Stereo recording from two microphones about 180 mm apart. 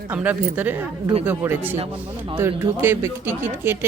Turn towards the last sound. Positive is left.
turn(degrees=-10)  # may be behind; listen again after turning